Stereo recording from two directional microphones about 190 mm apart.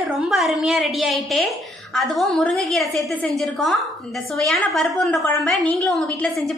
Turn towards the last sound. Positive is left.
turn(degrees=0)  # may be behind; listen again after turning